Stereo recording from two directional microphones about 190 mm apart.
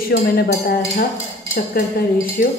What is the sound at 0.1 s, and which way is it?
Speech, 55° left (ahead or behind).